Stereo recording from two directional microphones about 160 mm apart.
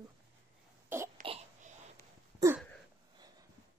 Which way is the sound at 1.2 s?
40° right (ahead or behind).